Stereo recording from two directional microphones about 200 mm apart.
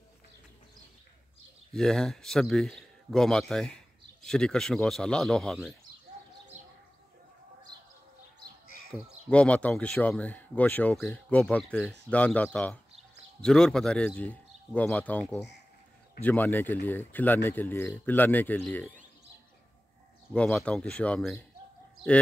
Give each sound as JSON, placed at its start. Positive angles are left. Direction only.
{"t": 1.7, "sound": "a man's voice", "side_deg": 0}
{"t": 6.5, "sound": "bird", "side_deg": -35}
{"t": 9.3, "sound": "a man's voice", "side_deg": 5}
{"t": 20.3, "sound": "a man's voice", "side_deg": 5}